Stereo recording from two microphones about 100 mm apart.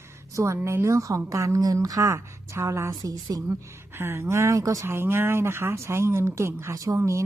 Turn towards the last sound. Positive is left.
turn(degrees=-30)  # may be behind; listen again after turning